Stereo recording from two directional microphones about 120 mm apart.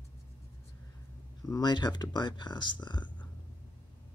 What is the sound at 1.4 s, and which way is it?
Speech, 35° left (ahead or behind).